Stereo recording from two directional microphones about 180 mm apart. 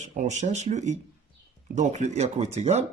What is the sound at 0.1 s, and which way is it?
Speech, 40° right (ahead or behind).